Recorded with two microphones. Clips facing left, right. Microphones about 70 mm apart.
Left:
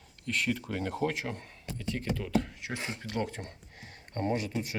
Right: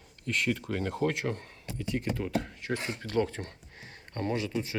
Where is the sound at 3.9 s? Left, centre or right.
Right.